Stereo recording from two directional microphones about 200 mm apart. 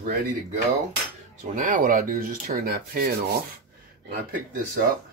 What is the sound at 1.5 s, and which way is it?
Speech, 40° right (ahead or behind).